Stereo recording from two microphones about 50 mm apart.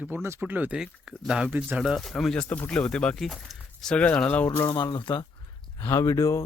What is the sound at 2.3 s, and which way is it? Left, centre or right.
Speech, left.